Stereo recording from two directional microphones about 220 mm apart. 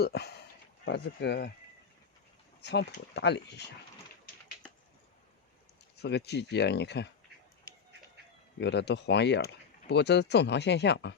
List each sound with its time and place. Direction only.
0.0 s speech: 50° left (ahead or behind)
2.6 s speech: 50° left (ahead or behind)
6.0 s speech: 50° left (ahead or behind)
8.6 s speech: 50° left (ahead or behind)